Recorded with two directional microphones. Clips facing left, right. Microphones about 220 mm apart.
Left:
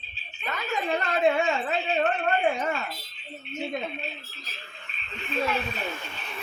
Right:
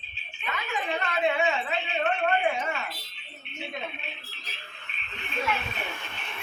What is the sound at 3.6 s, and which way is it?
Speech, 40° left (ahead or behind).